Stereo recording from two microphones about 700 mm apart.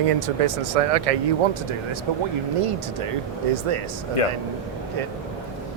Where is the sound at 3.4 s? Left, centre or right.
Right.